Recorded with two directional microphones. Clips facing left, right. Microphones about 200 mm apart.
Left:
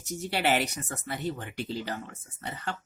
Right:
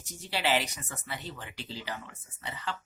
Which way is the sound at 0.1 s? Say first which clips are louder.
Left 3 dB; 50° left (ahead or behind).